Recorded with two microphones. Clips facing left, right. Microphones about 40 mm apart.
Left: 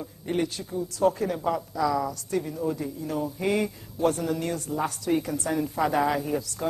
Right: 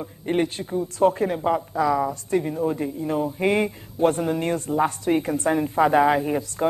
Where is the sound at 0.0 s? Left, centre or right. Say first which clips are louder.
Right 5 dB; right.